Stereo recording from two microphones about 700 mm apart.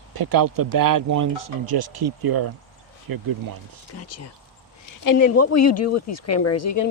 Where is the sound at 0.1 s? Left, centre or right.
Right.